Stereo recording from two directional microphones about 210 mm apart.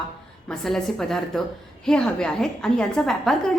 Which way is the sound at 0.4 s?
Centre (ahead or behind).